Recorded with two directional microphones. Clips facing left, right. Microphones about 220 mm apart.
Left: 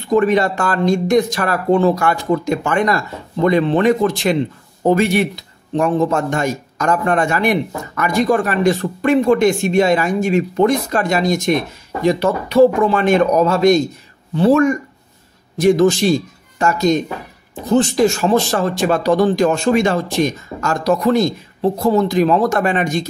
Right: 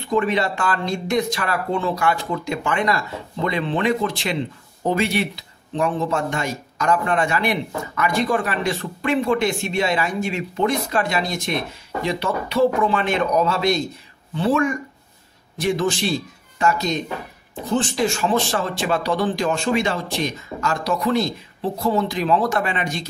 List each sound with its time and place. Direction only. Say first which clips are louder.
0.1 s speech: left 6 dB; 45° left (ahead or behind)